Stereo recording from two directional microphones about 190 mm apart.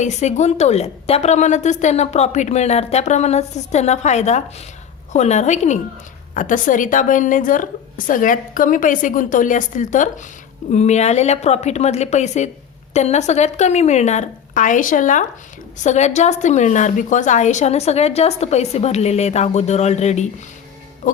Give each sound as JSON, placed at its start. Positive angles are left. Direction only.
{"t": 0.0, "sound": "a woman's voice", "side_deg": 35}
{"t": 21.0, "sound": "music", "side_deg": 40}